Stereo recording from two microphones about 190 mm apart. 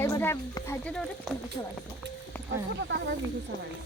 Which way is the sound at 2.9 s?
80° right.